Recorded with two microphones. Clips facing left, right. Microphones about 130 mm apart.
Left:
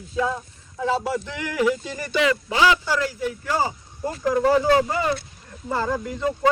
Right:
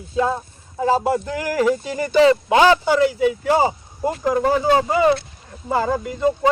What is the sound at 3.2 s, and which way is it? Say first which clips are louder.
Speech: right 7 dB; 75° right (ahead or behind).